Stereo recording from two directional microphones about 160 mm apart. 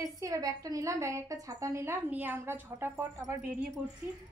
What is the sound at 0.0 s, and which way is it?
A woman's voice, 20° right (ahead or behind).